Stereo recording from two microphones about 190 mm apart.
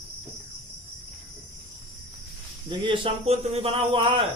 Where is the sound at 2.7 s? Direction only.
25° right (ahead or behind).